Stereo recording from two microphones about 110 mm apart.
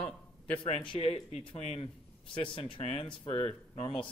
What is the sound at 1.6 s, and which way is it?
Speech, 75° left (ahead or behind).